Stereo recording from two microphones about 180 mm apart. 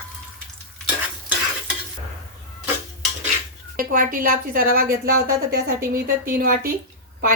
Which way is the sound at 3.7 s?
50° right (ahead or behind).